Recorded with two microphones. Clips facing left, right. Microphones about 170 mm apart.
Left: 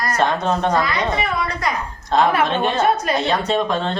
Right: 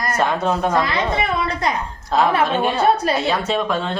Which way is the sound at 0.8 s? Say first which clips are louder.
Right 1 dB; 25° right (ahead or behind).